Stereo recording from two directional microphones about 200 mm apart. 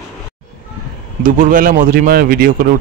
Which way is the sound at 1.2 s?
45° right (ahead or behind).